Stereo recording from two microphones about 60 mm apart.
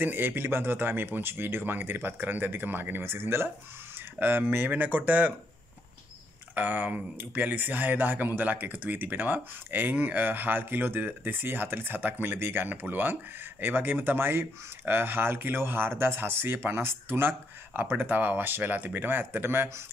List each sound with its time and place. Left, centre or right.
0.0 s speech: right
6.5 s speech: right